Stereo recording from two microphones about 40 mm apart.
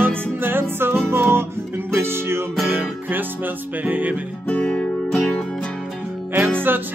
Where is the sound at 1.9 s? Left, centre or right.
Right.